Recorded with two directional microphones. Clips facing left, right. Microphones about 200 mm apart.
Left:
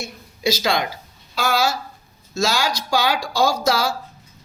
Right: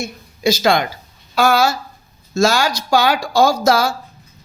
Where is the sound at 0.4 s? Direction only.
50° right (ahead or behind).